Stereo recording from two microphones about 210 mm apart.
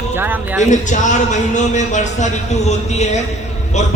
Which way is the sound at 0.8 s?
35° left (ahead or behind).